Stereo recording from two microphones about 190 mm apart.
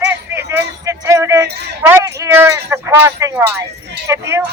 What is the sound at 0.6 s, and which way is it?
Speech, 15° right (ahead or behind).